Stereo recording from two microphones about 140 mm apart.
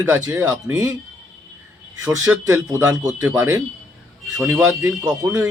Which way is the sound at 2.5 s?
20° right (ahead or behind).